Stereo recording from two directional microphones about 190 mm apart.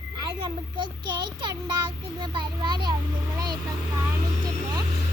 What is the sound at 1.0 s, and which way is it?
A child's voice, 25° right (ahead or behind).